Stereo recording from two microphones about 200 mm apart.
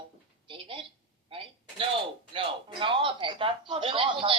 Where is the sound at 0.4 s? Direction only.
25° right (ahead or behind).